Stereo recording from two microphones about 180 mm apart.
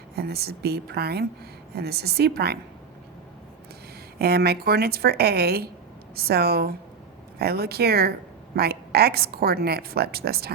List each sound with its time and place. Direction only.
0.2 s a woman's voice: 60° right (ahead or behind)
4.2 s a woman's voice: 60° right (ahead or behind)